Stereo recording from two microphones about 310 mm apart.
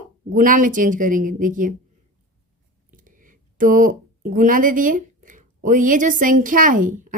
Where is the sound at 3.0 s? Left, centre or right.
Right.